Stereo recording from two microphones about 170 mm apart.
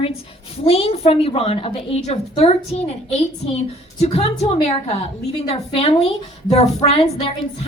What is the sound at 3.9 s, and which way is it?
A woman's voice, 40° left (ahead or behind).